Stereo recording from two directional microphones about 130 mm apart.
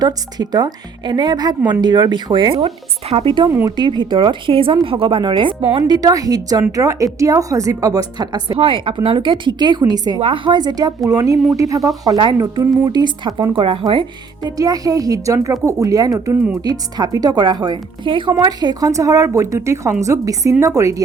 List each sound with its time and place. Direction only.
0.0 s a woman's voice: 30° right (ahead or behind)
8.5 s a woman's voice: 40° right (ahead or behind)
10.2 s a woman's voice: 45° right (ahead or behind)
14.4 s speech: 30° right (ahead or behind)